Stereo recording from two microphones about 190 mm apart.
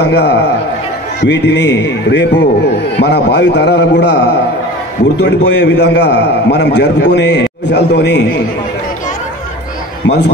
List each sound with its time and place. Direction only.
0.0 s a man's voice: 60° left (ahead or behind)
10.0 s a man's voice: 65° left (ahead or behind)